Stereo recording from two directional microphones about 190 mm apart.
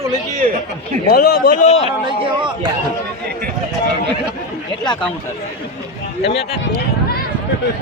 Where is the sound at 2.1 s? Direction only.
25° right (ahead or behind).